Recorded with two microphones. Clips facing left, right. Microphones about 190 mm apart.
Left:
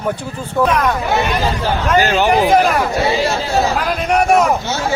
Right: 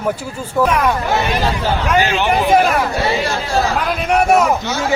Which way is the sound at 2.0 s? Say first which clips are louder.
Left 3 dB; 40° left (ahead or behind).